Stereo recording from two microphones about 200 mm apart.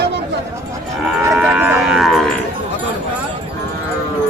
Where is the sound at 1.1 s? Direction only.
Centre (ahead or behind).